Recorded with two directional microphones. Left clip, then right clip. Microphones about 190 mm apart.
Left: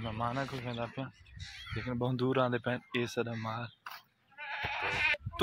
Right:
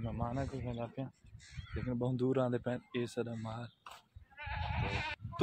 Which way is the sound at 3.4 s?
10° left (ahead or behind).